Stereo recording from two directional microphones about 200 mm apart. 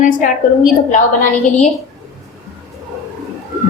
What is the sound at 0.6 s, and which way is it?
Speech, 40° left (ahead or behind).